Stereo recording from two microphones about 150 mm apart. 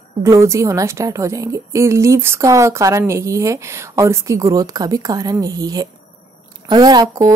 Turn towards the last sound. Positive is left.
turn(degrees=-25)  # may be behind; listen again after turning